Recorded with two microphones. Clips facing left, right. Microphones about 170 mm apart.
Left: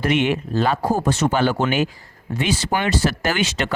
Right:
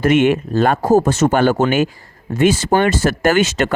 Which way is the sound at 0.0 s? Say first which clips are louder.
Right 6 dB; 50° right (ahead or behind).